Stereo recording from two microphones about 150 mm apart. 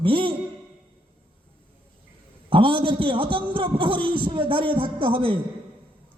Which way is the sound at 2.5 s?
35° right (ahead or behind).